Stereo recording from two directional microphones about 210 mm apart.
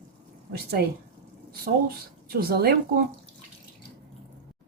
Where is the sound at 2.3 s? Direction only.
50° right (ahead or behind).